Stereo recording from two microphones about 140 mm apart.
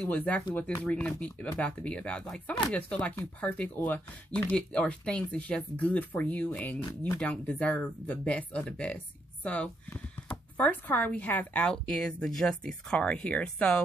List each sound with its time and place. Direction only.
0.0 s speech: 10° left (ahead or behind)
7.2 s speech: 10° left (ahead or behind)